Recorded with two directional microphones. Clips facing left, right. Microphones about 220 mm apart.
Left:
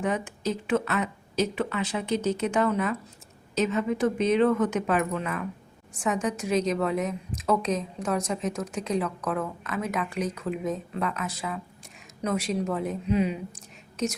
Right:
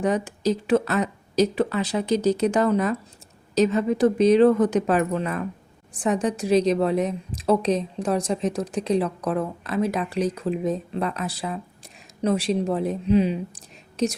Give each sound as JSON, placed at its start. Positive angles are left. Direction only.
{"t": 0.0, "sound": "a woman's voice", "side_deg": -35}